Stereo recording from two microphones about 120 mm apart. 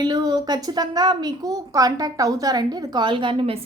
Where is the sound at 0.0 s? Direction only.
35° right (ahead or behind).